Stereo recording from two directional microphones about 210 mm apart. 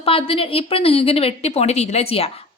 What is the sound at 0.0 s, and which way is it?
A woman's voice, 25° left (ahead or behind).